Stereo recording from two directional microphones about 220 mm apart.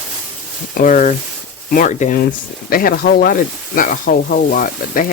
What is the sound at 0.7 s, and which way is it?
Speech, 35° left (ahead or behind).